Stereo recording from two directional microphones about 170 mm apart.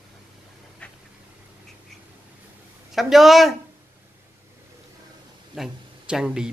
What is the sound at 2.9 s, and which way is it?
Speech, centre (ahead or behind).